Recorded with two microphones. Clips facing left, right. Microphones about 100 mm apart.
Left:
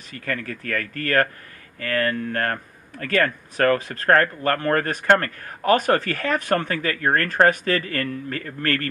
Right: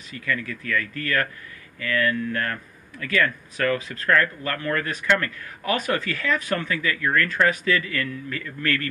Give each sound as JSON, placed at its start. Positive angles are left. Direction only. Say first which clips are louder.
{"t": 0.1, "sound": "speech", "louder": "even", "side_deg": 50}